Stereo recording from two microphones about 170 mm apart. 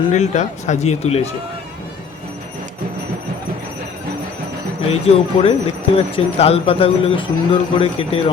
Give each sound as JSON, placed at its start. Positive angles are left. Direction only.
{"t": 0.1, "sound": "speech", "side_deg": 45}
{"t": 4.9, "sound": "speech", "side_deg": 35}